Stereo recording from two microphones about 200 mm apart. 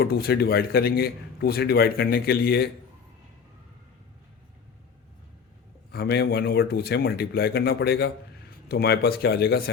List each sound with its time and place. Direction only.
0.0 s a man's voice: 50° left (ahead or behind)
5.9 s a man's voice: 55° left (ahead or behind)